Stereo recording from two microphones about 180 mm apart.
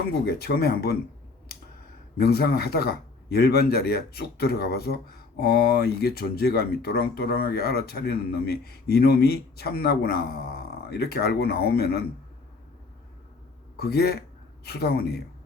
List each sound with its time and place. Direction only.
0.3 s a man's voice: 60° left (ahead or behind)
2.1 s a man's voice: 60° left (ahead or behind)
13.7 s speech: 60° left (ahead or behind)